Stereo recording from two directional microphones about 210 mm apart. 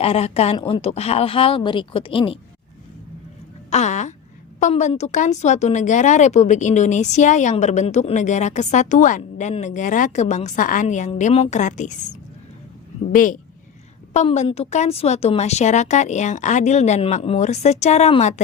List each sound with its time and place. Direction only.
0.0 s speech: 30° left (ahead or behind)
3.7 s speech: 35° left (ahead or behind)
13.1 s speech: 40° left (ahead or behind)